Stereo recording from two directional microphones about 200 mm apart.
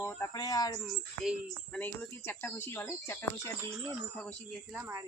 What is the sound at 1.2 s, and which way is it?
Speech, centre (ahead or behind).